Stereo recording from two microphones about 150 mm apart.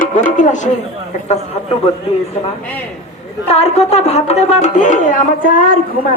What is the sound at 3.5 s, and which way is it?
Speech, 45° left (ahead or behind).